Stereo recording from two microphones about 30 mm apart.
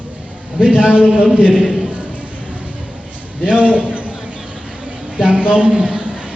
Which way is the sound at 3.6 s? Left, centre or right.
Right.